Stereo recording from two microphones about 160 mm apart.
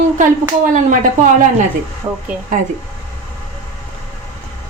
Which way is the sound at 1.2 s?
50° right (ahead or behind).